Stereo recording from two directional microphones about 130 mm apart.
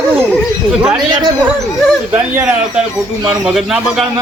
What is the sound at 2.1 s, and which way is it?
Speech, 15° right (ahead or behind).